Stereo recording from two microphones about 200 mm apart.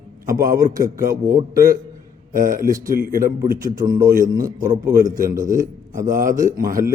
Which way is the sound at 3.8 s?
20° right (ahead or behind).